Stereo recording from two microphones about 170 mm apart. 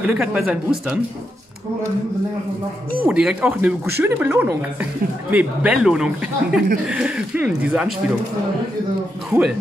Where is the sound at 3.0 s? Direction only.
5° right (ahead or behind).